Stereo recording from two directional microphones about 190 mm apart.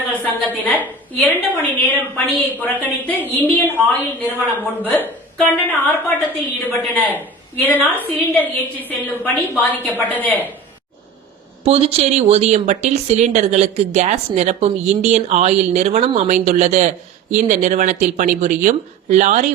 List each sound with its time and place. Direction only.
0.1 s a woman's voice: 10° left (ahead or behind)
6.9 s a woman's voice: 10° left (ahead or behind)
11.6 s speech: 30° right (ahead or behind)